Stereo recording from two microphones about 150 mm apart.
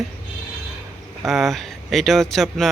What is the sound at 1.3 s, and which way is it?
Speech, centre (ahead or behind).